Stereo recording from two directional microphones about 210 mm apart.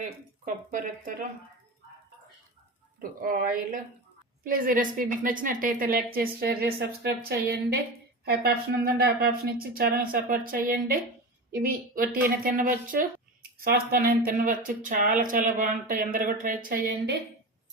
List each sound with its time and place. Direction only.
0.4 s speech: 40° right (ahead or behind)
3.0 s a woman's voice: 40° right (ahead or behind)